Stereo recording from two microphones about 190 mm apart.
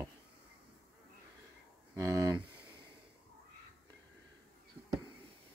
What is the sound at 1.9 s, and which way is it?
Speech, 15° right (ahead or behind).